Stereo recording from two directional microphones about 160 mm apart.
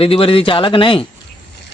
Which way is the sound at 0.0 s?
35° left (ahead or behind).